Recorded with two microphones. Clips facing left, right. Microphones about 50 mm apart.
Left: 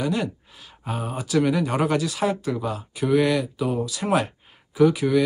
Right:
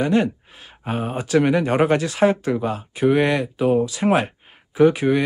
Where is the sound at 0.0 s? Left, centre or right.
Right.